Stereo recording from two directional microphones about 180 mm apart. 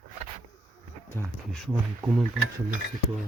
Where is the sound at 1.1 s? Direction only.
15° left (ahead or behind).